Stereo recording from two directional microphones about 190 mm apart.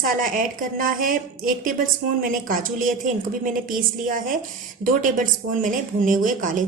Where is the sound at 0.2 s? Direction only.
45° right (ahead or behind).